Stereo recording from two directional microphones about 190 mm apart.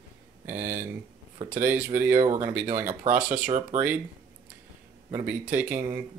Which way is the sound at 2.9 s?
35° right (ahead or behind).